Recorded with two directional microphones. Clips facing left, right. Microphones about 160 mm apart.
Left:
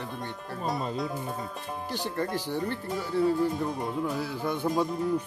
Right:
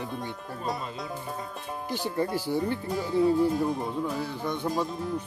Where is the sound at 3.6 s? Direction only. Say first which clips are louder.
Right 1 dB; centre (ahead or behind).